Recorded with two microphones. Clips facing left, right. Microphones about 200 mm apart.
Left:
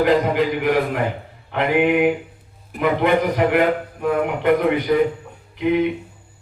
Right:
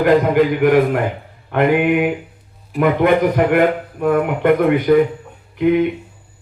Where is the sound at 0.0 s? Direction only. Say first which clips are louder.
Right 4 dB; 50° right (ahead or behind).